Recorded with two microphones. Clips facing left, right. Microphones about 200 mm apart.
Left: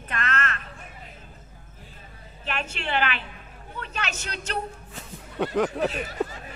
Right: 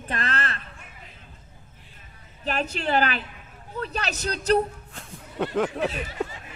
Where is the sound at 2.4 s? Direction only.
40° right (ahead or behind).